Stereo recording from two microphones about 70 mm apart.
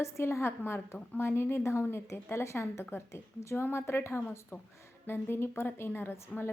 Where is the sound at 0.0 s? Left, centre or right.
Left.